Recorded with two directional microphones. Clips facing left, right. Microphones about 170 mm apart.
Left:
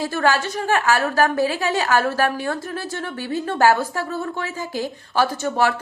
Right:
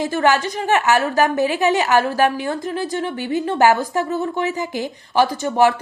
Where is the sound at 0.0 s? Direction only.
20° right (ahead or behind).